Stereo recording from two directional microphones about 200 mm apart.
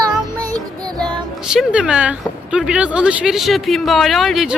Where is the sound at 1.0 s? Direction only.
5° right (ahead or behind).